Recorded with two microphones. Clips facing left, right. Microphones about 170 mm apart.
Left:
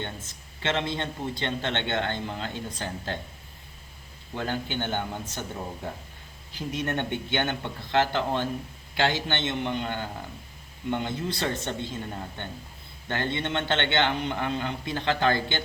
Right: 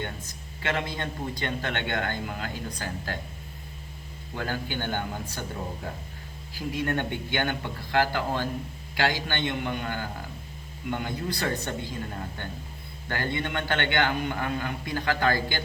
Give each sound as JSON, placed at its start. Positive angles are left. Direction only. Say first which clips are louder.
{"t": 0.0, "sound": "a man's voice", "louder": "right 1 dB", "side_deg": 25}
{"t": 4.4, "sound": "a man's voice", "louder": "left 1 dB", "side_deg": 20}
{"t": 6.5, "sound": "a man's voice", "louder": "right 1 dB", "side_deg": 20}
{"t": 13.1, "sound": "a man's voice", "louder": "left 1 dB", "side_deg": 20}